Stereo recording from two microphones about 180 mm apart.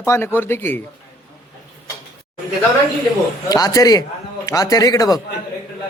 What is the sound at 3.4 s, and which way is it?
A man's voice, 20° left (ahead or behind).